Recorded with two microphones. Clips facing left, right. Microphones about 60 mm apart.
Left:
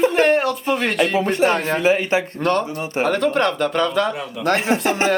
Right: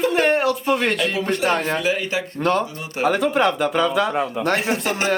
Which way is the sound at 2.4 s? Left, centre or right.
Centre.